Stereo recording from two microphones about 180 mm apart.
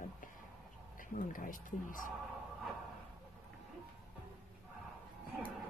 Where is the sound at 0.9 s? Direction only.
50° left (ahead or behind).